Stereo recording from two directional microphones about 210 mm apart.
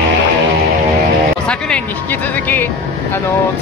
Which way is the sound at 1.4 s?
5° left (ahead or behind).